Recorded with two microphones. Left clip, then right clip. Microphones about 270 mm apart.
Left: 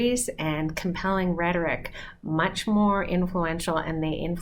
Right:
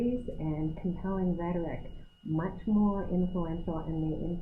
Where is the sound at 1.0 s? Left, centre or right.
Centre.